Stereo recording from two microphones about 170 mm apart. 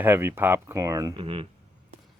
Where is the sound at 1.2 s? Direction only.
30° right (ahead or behind).